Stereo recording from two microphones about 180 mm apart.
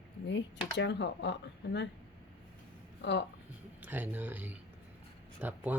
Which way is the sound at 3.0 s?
75° left (ahead or behind).